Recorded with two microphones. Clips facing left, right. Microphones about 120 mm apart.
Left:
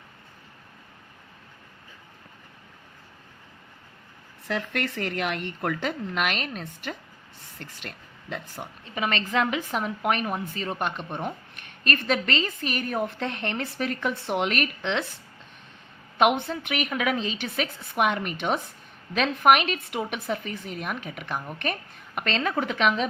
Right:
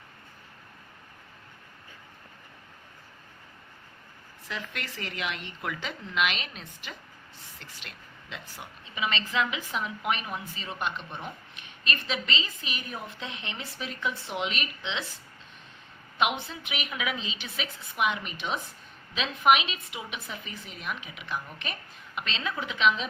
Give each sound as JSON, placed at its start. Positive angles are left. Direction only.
{"t": 4.4, "sound": "a woman's voice", "side_deg": 60}
{"t": 16.1, "sound": "a woman's voice", "side_deg": 50}